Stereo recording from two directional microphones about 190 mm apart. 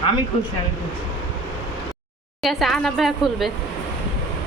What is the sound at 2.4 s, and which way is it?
A woman's voice, centre (ahead or behind).